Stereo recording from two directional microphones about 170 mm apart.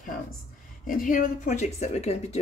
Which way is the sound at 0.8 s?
55° left (ahead or behind).